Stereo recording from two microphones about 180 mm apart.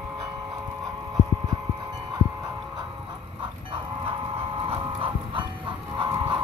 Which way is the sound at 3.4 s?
30° right (ahead or behind).